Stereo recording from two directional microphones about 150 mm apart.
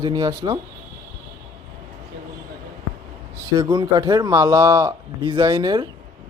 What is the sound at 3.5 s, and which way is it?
Speech, 30° right (ahead or behind).